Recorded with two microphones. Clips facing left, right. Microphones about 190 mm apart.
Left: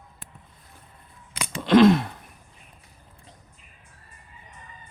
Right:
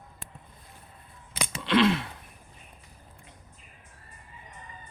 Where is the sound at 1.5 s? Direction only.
45° left (ahead or behind).